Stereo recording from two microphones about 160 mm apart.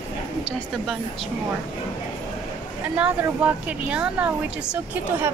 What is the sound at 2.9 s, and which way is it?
A woman's voice, 10° right (ahead or behind).